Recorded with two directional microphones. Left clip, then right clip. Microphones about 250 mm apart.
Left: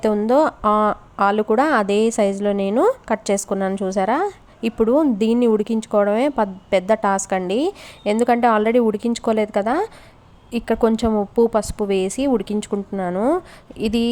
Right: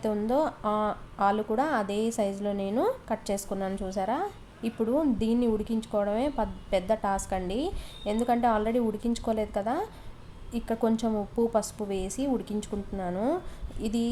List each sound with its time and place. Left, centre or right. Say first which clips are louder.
0.0 s a woman's voice: left 11 dB; left